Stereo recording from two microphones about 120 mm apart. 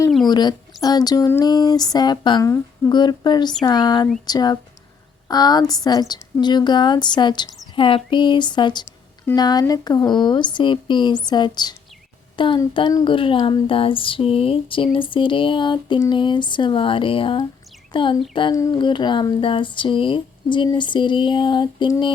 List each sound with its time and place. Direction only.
0.3 s a woman's voice: 35° left (ahead or behind)
2.4 s speech: 25° left (ahead or behind)
2.9 s a woman's voice: 40° left (ahead or behind)
12.4 s a sound: 45° left (ahead or behind)
17.9 s a woman's voice: 40° left (ahead or behind)